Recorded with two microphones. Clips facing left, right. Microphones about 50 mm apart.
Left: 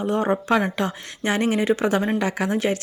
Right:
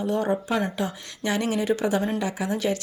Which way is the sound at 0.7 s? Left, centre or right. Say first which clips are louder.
Left 3 dB; left.